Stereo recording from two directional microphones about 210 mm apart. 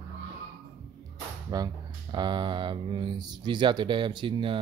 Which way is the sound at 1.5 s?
20° right (ahead or behind).